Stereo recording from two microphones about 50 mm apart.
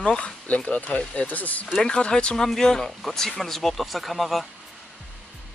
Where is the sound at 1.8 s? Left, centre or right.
Centre.